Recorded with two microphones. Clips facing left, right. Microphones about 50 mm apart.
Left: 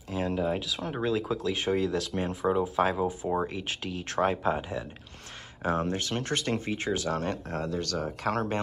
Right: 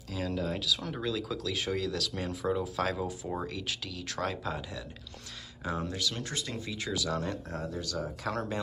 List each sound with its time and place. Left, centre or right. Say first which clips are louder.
0.1 s speech: left 5 dB; left
5.6 s speech: left 5 dB; left
7.6 s speech: left 5 dB; left